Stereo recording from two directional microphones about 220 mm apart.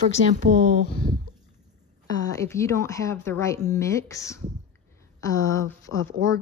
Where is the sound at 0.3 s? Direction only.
35° right (ahead or behind).